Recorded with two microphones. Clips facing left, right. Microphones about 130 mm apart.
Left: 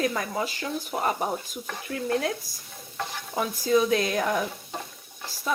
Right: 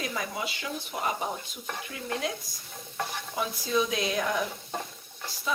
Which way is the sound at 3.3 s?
50° left (ahead or behind).